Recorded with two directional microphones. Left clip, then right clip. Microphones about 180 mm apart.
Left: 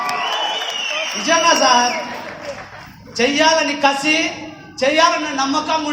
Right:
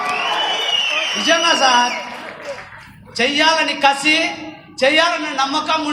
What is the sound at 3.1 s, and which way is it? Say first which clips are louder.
A man's voice: even; 15° left (ahead or behind).